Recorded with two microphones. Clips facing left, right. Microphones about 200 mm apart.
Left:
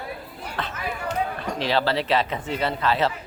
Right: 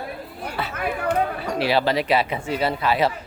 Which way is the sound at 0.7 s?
60° right (ahead or behind).